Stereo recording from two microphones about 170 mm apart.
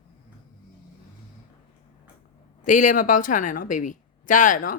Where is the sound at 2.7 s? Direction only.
50° left (ahead or behind).